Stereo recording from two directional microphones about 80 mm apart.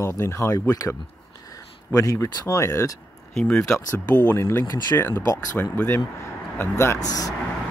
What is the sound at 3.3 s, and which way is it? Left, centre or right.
Speech, centre.